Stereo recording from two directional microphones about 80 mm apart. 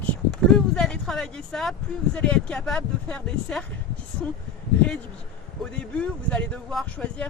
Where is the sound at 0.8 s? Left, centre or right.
Centre.